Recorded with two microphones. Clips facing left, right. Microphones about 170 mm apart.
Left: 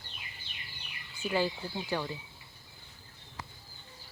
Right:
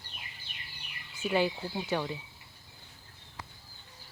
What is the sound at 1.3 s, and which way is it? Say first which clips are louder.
Speech: right 2 dB; 20° right (ahead or behind).